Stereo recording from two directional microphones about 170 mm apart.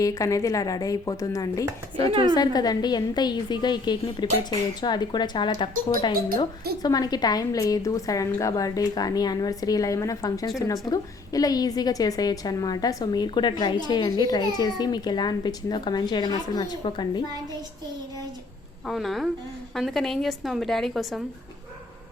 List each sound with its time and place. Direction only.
0.0 s a woman's voice: 20° left (ahead or behind)
6.8 s a woman's voice: 25° left (ahead or behind)
18.9 s a woman's voice: centre (ahead or behind)